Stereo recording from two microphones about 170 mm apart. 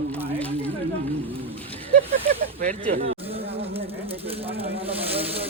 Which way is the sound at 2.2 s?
50° right (ahead or behind).